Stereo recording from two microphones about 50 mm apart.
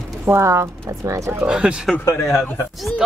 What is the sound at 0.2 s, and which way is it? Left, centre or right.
Speech, right.